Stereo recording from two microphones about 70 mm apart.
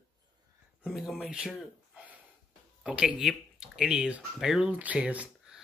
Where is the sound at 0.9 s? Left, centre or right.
Centre.